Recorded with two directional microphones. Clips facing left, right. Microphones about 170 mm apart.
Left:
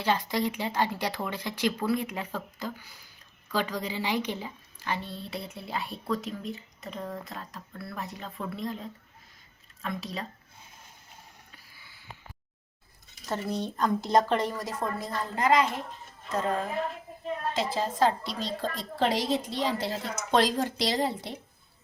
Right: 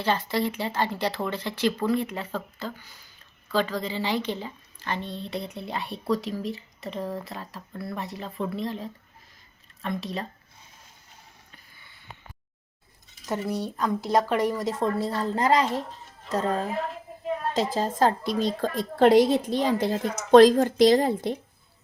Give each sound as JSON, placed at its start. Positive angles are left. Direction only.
{"t": 0.0, "sound": "speech", "side_deg": 10}
{"t": 13.2, "sound": "speech", "side_deg": -10}
{"t": 14.6, "sound": "a woman's voice", "side_deg": -25}
{"t": 17.5, "sound": "a woman's voice", "side_deg": -45}